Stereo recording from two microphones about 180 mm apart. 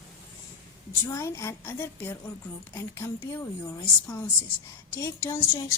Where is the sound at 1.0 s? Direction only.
15° left (ahead or behind).